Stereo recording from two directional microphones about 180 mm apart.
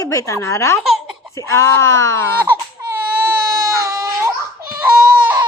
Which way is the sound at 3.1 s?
15° right (ahead or behind).